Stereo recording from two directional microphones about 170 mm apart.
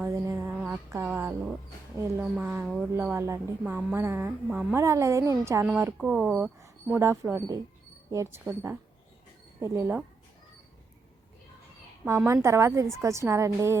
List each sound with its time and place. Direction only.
0.0 s a sound: 15° right (ahead or behind)
2.3 s a woman's voice: 10° right (ahead or behind)
2.9 s a woman's voice: 10° right (ahead or behind)
3.6 s a woman's voice: 5° right (ahead or behind)
12.0 s a woman's voice: 15° right (ahead or behind)